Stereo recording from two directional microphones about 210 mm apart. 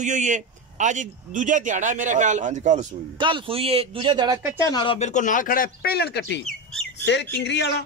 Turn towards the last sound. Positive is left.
turn(degrees=55)  # may be behind; listen again after turning